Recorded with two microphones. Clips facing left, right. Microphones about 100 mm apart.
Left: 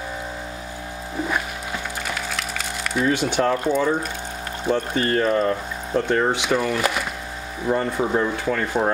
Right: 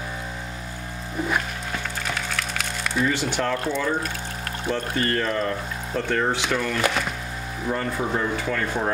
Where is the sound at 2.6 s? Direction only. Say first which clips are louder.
Left 1 dB; centre (ahead or behind).